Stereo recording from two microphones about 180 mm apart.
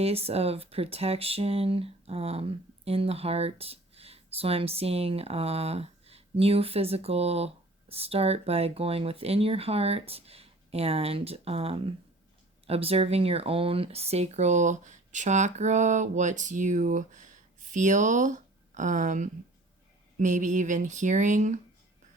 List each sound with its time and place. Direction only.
0.0 s speech: 35° right (ahead or behind)